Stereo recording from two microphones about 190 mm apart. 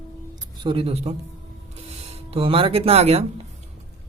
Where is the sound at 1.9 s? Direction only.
30° right (ahead or behind).